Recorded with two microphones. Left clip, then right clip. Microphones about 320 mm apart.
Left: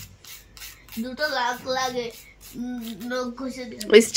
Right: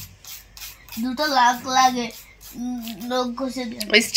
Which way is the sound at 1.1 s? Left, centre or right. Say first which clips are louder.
Right 7 dB; right.